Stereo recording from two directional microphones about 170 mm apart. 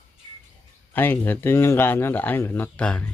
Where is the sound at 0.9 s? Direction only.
10° left (ahead or behind).